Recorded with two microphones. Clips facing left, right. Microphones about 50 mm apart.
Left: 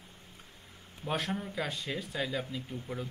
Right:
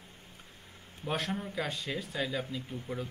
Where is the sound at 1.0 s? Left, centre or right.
Centre.